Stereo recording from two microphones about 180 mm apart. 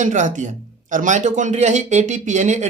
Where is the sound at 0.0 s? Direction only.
45° right (ahead or behind).